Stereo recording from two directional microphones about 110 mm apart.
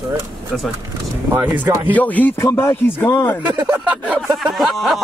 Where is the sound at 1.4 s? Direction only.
15° right (ahead or behind).